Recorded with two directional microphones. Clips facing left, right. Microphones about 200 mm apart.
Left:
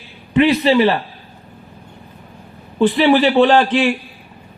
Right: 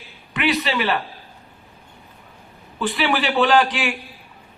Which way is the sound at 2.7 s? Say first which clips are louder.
Left 9 dB; 40° left (ahead or behind).